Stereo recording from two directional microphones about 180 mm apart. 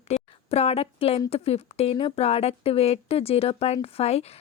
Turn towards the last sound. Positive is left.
turn(degrees=35)  # may be behind; listen again after turning